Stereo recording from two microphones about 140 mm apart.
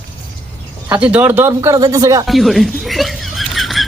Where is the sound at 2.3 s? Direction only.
Centre (ahead or behind).